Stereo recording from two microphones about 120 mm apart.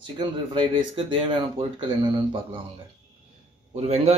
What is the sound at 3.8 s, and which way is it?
Speech, 65° right (ahead or behind).